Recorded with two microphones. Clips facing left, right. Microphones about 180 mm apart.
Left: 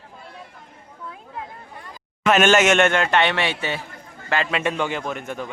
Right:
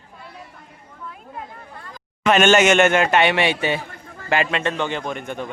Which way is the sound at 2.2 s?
Centre (ahead or behind).